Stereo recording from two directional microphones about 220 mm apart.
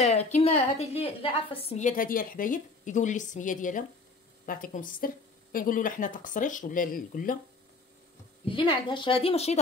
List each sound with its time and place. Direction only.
0.0 s a woman's voice: 30° left (ahead or behind)
8.5 s a woman's voice: 20° left (ahead or behind)